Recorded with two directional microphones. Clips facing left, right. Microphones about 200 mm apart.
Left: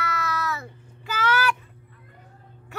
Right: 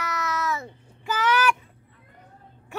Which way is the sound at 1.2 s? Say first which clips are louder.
Right 1 dB; 15° right (ahead or behind).